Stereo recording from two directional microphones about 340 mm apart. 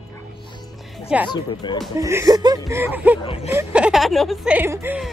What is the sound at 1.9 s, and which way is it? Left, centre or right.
Speech, centre.